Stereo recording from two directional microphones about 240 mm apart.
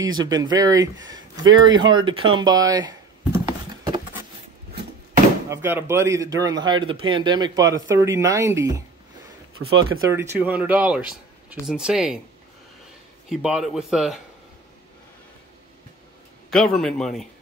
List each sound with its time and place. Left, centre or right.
0.0 s speech: centre
5.5 s speech: centre
9.6 s speech: right
10.0 s speech: centre
13.3 s speech: centre
16.4 s speech: centre